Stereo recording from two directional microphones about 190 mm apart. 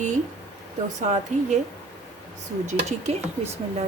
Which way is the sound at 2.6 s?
35° right (ahead or behind).